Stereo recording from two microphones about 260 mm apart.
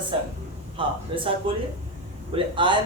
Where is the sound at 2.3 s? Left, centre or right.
Centre.